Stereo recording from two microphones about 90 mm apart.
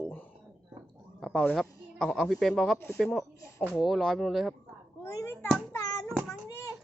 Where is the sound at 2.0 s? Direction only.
5° left (ahead or behind).